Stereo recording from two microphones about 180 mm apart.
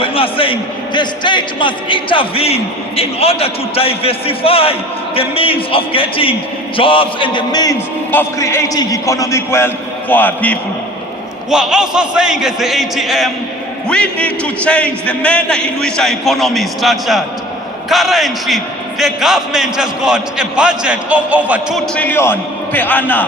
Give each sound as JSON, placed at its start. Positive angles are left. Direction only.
{"t": 0.0, "sound": "a man's voice", "side_deg": 30}
{"t": 6.7, "sound": "music", "side_deg": 30}
{"t": 8.1, "sound": "a man's voice", "side_deg": 15}
{"t": 11.5, "sound": "a man's voice", "side_deg": -5}
{"t": 21.9, "sound": "a man's voice", "side_deg": 10}